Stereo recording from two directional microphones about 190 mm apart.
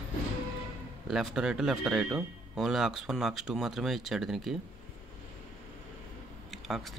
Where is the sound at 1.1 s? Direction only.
Centre (ahead or behind).